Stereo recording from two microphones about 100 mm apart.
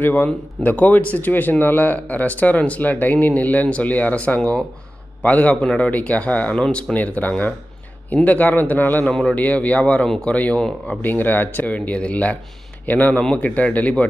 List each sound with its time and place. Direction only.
0.0 s speech: 20° left (ahead or behind)